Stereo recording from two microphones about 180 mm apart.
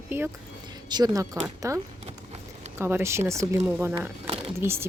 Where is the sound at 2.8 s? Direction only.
15° right (ahead or behind).